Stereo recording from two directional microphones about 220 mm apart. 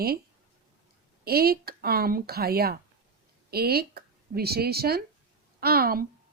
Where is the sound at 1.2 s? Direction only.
45° right (ahead or behind).